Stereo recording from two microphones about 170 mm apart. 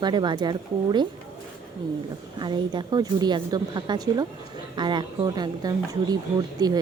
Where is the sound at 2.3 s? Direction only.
25° right (ahead or behind).